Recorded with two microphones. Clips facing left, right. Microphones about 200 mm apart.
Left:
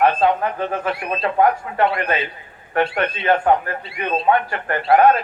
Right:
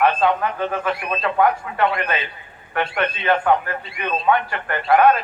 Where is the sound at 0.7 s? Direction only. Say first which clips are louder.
Even; 35° left (ahead or behind).